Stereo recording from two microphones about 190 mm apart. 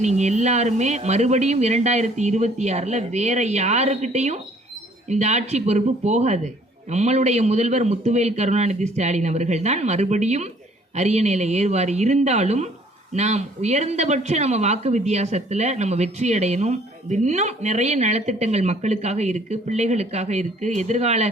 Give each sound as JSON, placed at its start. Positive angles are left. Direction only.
{"t": 0.0, "sound": "speech", "side_deg": -35}